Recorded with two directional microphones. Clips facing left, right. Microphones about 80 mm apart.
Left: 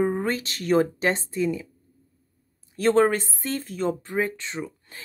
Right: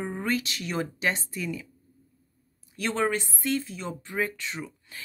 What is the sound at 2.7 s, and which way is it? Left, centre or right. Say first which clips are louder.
Speech: left 8 dB; left.